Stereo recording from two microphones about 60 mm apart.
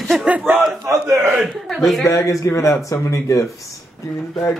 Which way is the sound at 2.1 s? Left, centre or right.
Left.